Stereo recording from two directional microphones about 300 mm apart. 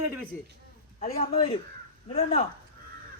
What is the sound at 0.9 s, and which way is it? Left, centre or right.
A man's voice, left.